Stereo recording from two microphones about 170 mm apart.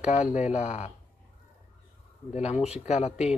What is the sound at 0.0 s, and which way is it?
Speech, 45° left (ahead or behind).